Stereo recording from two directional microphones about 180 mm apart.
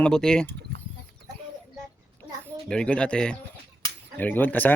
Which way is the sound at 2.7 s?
5° left (ahead or behind).